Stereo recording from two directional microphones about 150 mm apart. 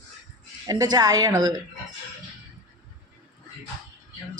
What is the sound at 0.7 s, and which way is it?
Speech, 25° right (ahead or behind).